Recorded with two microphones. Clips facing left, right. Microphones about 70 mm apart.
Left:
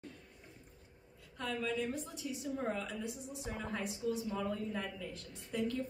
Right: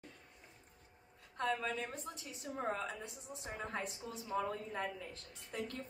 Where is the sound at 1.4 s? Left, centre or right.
Right.